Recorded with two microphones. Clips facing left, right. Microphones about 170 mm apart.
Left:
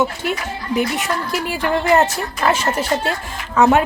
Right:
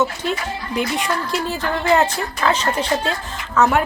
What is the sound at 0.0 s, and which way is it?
Speech, 5° left (ahead or behind).